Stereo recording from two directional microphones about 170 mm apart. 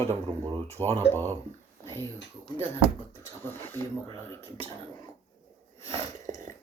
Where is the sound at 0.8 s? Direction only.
20° right (ahead or behind).